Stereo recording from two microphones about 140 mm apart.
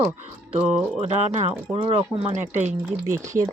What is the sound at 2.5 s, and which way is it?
Speech, 55° right (ahead or behind).